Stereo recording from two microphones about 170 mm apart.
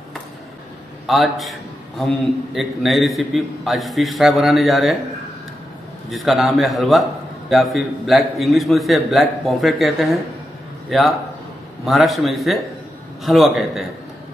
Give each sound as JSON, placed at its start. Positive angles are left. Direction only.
{"t": 1.0, "sound": "a man's voice", "side_deg": 0}
{"t": 6.0, "sound": "a man's voice", "side_deg": 0}